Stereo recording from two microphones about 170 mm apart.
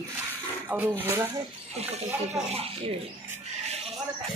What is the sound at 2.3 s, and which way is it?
Speech, 35° right (ahead or behind).